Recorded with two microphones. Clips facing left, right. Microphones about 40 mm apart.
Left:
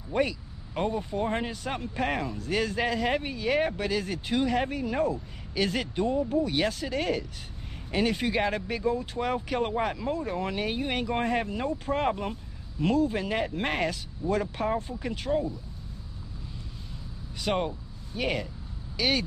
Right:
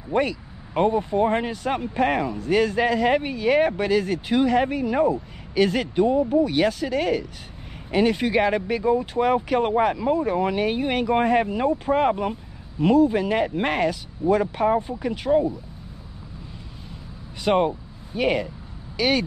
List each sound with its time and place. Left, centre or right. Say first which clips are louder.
0.1 s speech: right 5 dB; right
1.3 s speech: right 7 dB; centre
5.5 s speech: right 8 dB; centre
5.9 s speech: right 8 dB; centre
6.4 s speech: right 7 dB; centre
14.3 s speech: right 8 dB; centre
17.6 s vehicle: right 9 dB; right
18.2 s speech: right 7 dB; centre